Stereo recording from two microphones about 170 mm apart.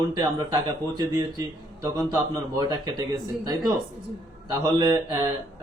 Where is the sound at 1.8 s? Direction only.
20° right (ahead or behind).